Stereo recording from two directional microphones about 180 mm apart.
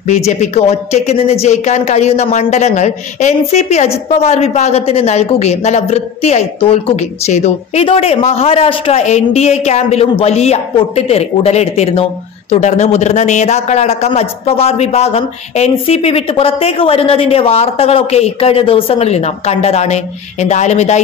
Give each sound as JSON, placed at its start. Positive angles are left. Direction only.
{"t": 0.1, "sound": "a man's voice", "side_deg": 40}